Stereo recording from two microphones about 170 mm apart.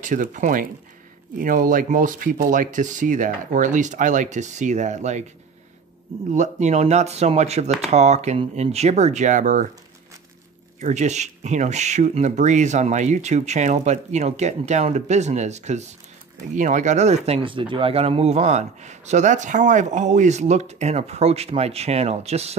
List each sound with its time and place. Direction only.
0.0 s speech: 50° right (ahead or behind)
6.3 s speech: 45° right (ahead or behind)
10.8 s speech: 45° right (ahead or behind)